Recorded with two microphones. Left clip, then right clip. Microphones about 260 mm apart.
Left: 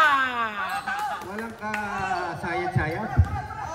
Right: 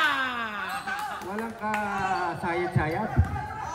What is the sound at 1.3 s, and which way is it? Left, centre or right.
Chop, right.